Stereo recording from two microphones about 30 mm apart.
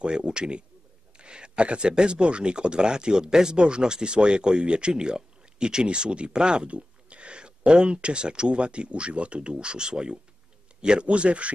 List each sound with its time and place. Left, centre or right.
0.0 s speech: right
11.1 s speech: right